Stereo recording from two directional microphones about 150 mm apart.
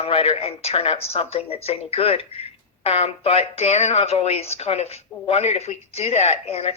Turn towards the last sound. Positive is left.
turn(degrees=45)  # may be behind; listen again after turning